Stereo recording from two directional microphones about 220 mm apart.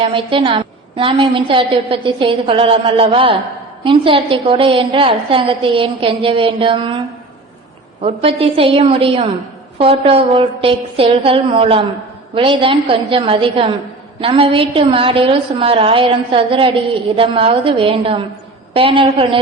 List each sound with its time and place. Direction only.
0.0 s a woman's voice: 25° right (ahead or behind)
8.0 s a woman's voice: 25° right (ahead or behind)